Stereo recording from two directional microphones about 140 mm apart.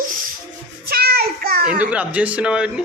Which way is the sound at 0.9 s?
90° right.